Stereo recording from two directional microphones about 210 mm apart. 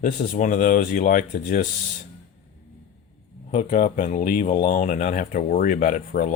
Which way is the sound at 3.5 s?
35° left (ahead or behind).